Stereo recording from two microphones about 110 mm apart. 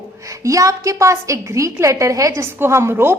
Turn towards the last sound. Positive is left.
turn(degrees=-20)  # may be behind; listen again after turning